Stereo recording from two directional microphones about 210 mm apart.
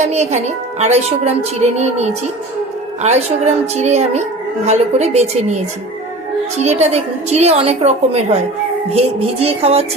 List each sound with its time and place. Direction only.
0.0 s a woman's voice: 30° right (ahead or behind)
6.6 s a woman's voice: 30° right (ahead or behind)
8.9 s music: 30° right (ahead or behind)